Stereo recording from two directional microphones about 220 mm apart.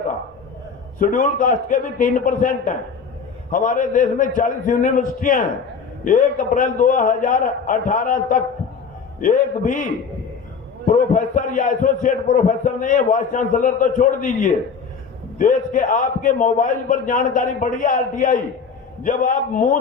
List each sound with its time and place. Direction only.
0.9 s a man's voice: 35° left (ahead or behind)